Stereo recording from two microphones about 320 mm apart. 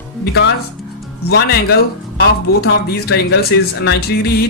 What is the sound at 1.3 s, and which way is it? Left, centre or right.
Speech, left.